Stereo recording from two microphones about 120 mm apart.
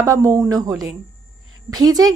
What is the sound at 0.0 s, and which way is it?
A woman's voice, 25° right (ahead or behind).